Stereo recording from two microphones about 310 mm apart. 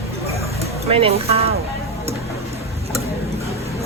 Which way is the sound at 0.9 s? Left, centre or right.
Centre.